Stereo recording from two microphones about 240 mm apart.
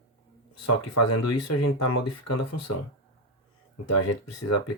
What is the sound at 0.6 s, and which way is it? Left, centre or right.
Speech, left.